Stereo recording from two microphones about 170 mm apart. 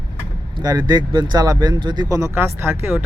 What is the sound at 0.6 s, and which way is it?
Speech, 25° right (ahead or behind).